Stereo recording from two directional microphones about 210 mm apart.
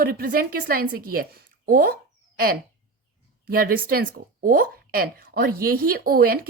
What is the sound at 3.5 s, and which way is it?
Speech, 45° right (ahead or behind).